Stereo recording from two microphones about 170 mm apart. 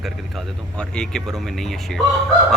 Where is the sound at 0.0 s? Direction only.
5° left (ahead or behind).